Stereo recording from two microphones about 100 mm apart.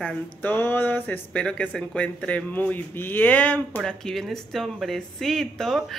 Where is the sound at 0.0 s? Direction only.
15° left (ahead or behind).